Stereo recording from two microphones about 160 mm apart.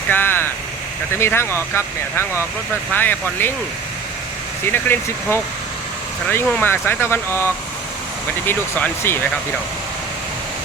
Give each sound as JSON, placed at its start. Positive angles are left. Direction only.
{"t": 0.1, "sound": "vehicle", "side_deg": 10}
{"t": 1.2, "sound": "speech", "side_deg": 15}
{"t": 4.6, "sound": "speech", "side_deg": 15}